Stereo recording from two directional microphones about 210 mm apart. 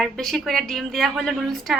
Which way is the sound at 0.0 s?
Centre (ahead or behind).